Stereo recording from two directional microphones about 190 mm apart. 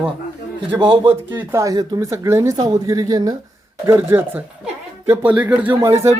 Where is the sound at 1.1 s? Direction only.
10° right (ahead or behind).